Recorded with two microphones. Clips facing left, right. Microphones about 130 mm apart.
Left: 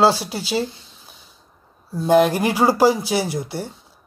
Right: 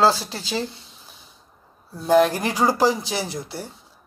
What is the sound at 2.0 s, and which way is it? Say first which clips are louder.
Speech: left 2 dB; 10° left (ahead or behind).